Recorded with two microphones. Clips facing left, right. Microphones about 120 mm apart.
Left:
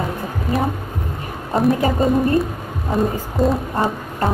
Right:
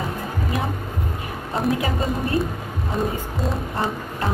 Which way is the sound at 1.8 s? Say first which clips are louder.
Left 7 dB; 35° left (ahead or behind).